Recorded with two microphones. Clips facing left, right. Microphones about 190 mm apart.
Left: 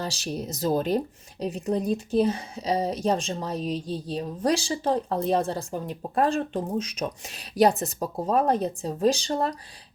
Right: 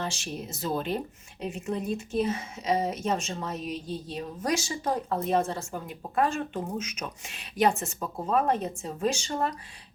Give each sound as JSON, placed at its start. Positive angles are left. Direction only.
{"t": 0.0, "sound": "speech", "side_deg": 35}